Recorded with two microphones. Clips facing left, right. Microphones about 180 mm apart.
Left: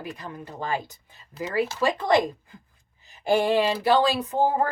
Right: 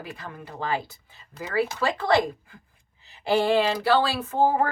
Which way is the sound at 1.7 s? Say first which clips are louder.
Left 3 dB; 15° left (ahead or behind).